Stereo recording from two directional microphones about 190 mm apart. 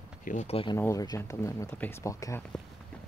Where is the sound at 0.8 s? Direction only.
15° left (ahead or behind).